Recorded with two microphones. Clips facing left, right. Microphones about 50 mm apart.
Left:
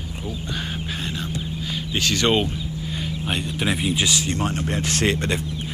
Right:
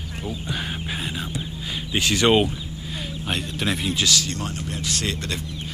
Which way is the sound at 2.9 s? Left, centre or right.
Centre.